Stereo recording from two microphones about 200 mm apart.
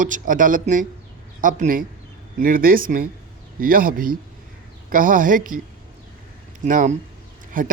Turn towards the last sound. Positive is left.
turn(degrees=-45)  # may be behind; listen again after turning